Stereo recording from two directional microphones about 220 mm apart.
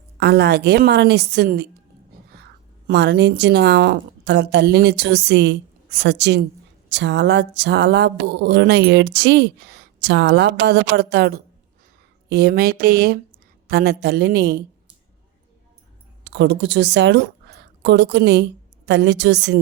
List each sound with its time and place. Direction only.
0.2 s a woman's voice: 50° right (ahead or behind)
16.2 s a woman's voice: 55° right (ahead or behind)